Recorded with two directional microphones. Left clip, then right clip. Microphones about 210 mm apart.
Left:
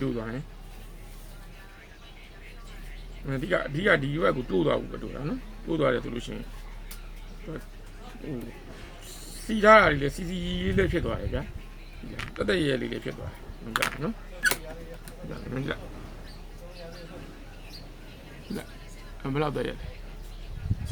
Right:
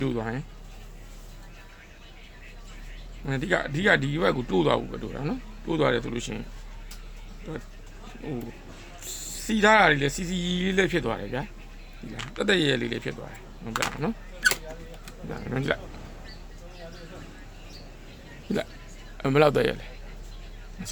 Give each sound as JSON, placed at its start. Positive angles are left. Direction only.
{"t": 0.0, "sound": "a man's voice", "side_deg": -50}
{"t": 3.2, "sound": "a man's voice", "side_deg": -55}
{"t": 9.0, "sound": "a man's voice", "side_deg": -50}
{"t": 12.1, "sound": "speech", "side_deg": 0}
{"t": 12.4, "sound": "a man's voice", "side_deg": -50}
{"t": 15.3, "sound": "a man's voice", "side_deg": -55}
{"t": 19.2, "sound": "a man's voice", "side_deg": -55}